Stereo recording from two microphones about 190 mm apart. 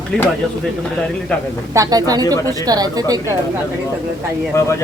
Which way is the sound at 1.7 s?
20° right (ahead or behind).